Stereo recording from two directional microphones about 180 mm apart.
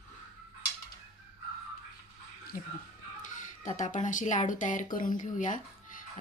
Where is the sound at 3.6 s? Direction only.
45° left (ahead or behind).